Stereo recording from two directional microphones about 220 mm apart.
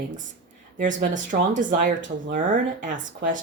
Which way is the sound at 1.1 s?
35° right (ahead or behind).